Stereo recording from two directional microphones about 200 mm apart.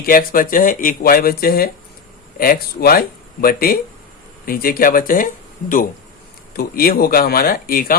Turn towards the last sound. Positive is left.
turn(degrees=45)  # may be behind; listen again after turning